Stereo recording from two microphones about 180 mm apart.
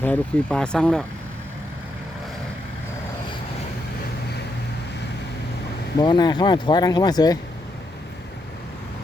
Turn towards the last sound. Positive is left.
turn(degrees=20)  # may be behind; listen again after turning